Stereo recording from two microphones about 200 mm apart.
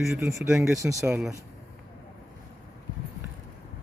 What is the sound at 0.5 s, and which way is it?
Speech, centre (ahead or behind).